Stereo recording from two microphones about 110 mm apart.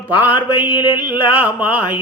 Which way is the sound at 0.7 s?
45° left (ahead or behind).